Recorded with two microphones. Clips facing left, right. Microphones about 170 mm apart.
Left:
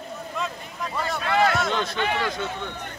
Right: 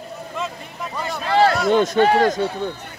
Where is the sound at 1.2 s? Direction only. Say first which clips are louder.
Right 5 dB; 30° right (ahead or behind).